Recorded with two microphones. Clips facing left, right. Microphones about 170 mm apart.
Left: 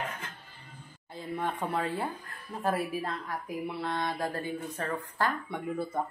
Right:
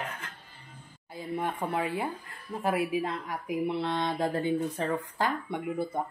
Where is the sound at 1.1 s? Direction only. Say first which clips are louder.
Right 1 dB; 10° right (ahead or behind).